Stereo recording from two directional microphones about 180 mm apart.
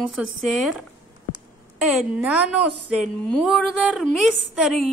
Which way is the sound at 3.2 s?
Centre (ahead or behind).